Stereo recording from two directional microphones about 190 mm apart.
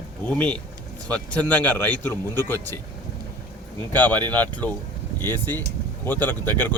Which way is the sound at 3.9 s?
10° left (ahead or behind).